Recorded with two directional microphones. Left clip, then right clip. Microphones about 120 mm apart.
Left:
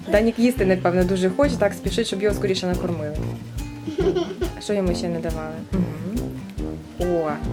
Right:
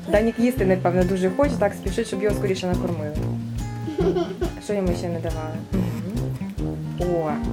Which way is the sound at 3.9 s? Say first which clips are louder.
Left 1 dB; centre (ahead or behind).